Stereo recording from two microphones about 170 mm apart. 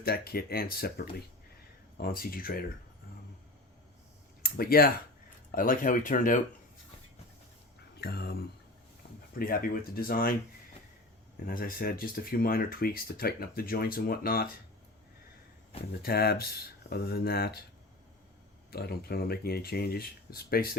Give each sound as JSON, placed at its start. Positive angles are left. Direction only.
{"t": 0.0, "sound": "speech", "side_deg": 65}
{"t": 4.4, "sound": "speech", "side_deg": 60}
{"t": 8.0, "sound": "speech", "side_deg": 70}
{"t": 9.0, "sound": "a sound", "side_deg": 60}
{"t": 9.4, "sound": "speech", "side_deg": 60}
{"t": 11.4, "sound": "speech", "side_deg": 55}
{"t": 16.0, "sound": "speech", "side_deg": 65}
{"t": 18.7, "sound": "speech", "side_deg": 65}